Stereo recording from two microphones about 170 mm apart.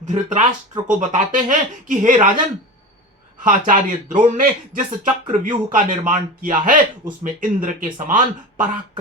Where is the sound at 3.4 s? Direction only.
50° right (ahead or behind).